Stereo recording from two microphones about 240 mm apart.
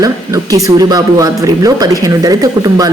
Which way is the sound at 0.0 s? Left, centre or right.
Centre.